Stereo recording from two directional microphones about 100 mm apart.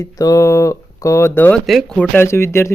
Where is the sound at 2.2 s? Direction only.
25° left (ahead or behind).